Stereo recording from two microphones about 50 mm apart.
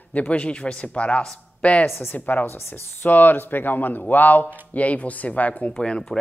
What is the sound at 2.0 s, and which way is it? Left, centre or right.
Speech, left.